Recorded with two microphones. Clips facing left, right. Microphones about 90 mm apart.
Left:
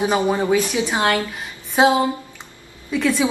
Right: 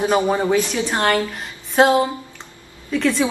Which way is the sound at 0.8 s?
5° left (ahead or behind).